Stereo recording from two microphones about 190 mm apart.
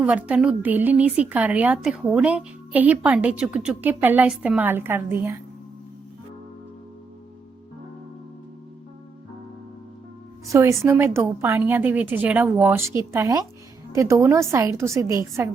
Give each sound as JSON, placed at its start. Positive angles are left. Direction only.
{"t": 0.0, "sound": "a woman's voice", "side_deg": -5}
{"t": 10.4, "sound": "a woman's voice", "side_deg": -15}